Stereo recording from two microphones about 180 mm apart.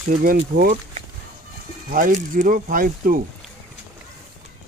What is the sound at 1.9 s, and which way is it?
Speech, 50° right (ahead or behind).